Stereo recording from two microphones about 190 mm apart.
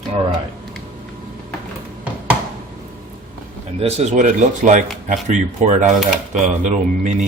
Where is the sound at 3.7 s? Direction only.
35° right (ahead or behind).